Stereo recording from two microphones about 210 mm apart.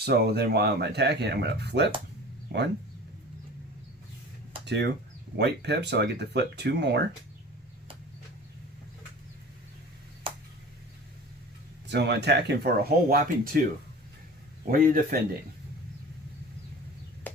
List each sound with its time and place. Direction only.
0.0 s speech: 50° right (ahead or behind)
4.6 s speech: 55° right (ahead or behind)
11.9 s speech: 55° right (ahead or behind)
14.7 s speech: 40° right (ahead or behind)